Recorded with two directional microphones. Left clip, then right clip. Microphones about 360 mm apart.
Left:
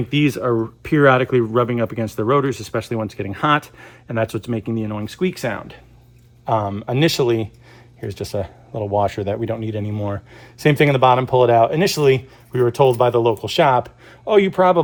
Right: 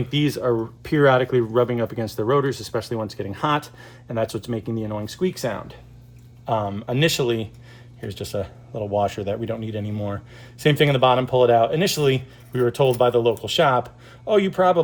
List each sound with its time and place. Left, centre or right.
0.1 s speech: centre